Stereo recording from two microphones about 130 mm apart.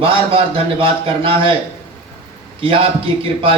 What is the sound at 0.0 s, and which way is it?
A man's voice, 45° right (ahead or behind).